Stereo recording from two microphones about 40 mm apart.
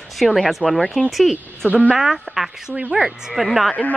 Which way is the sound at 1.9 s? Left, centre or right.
Centre.